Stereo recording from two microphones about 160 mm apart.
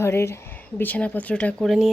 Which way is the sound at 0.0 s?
15° left (ahead or behind).